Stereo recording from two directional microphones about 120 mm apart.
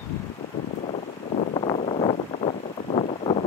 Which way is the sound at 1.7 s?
60° left (ahead or behind).